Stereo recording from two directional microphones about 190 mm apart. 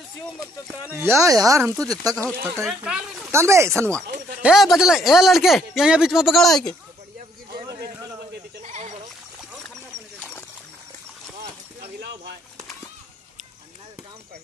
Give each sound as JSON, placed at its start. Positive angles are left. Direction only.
{"t": 0.9, "sound": "speech", "side_deg": -15}
{"t": 2.6, "sound": "speech", "side_deg": -5}
{"t": 3.3, "sound": "speech", "side_deg": -15}
{"t": 4.4, "sound": "speech", "side_deg": 0}
{"t": 7.6, "sound": "a sound", "side_deg": -20}
{"t": 8.6, "sound": "goat", "side_deg": -40}